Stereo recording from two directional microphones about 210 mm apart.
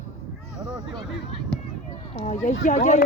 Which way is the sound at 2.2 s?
35° left (ahead or behind).